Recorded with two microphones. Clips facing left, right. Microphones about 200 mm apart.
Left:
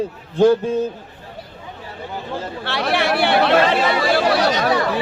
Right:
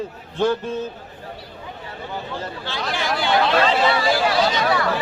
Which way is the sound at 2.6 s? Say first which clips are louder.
Left 7 dB; 65° left (ahead or behind).